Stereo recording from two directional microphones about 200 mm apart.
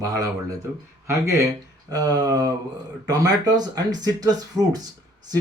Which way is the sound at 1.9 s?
20° right (ahead or behind).